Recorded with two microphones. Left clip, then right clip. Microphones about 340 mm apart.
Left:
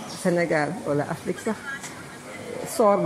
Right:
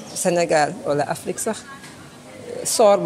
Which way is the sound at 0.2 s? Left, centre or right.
Right.